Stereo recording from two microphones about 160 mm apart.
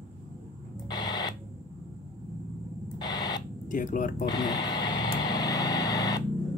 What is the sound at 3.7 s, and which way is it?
Speech, 55° left (ahead or behind).